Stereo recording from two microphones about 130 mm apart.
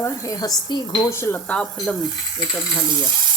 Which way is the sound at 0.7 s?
35° left (ahead or behind).